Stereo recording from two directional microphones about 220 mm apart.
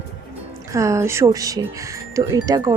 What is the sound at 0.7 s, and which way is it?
Speech, 15° right (ahead or behind).